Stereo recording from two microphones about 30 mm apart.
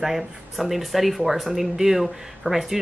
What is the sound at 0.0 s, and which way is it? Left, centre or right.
Speech, centre.